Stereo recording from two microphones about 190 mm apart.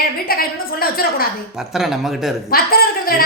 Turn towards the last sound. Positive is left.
turn(degrees=50)  # may be behind; listen again after turning